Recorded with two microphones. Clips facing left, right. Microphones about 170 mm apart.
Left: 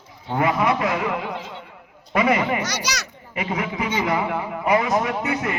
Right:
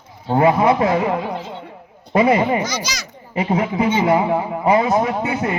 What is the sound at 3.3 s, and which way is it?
A man's voice, 35° right (ahead or behind).